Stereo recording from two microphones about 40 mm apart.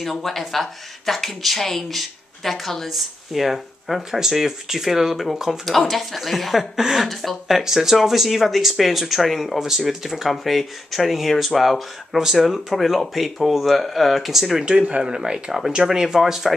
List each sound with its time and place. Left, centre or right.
0.0 s speech: centre
5.7 s speech: centre
7.1 s speech: centre
14.6 s speech: right
16.5 s speech: centre